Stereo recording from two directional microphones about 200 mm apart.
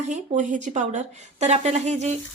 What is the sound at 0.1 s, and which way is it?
Speech, 35° right (ahead or behind).